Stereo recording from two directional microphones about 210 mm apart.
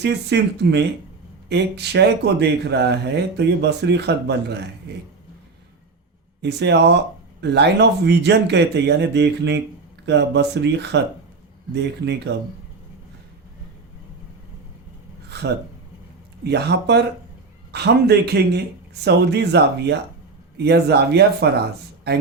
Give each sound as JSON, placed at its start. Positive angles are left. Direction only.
{"t": 0.0, "sound": "speech", "side_deg": -55}
{"t": 6.4, "sound": "speech", "side_deg": -55}
{"t": 15.3, "sound": "a sound", "side_deg": -55}
{"t": 16.4, "sound": "speech", "side_deg": -55}